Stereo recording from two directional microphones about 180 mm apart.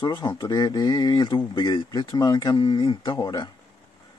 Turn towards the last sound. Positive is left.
turn(degrees=25)  # may be behind; listen again after turning